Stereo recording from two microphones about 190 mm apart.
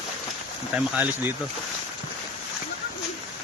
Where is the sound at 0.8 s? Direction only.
10° right (ahead or behind).